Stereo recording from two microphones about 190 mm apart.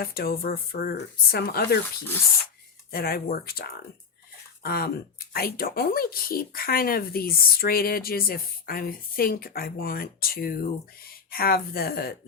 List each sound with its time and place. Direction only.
0.0 s speech: 50° left (ahead or behind)
2.9 s speech: 55° left (ahead or behind)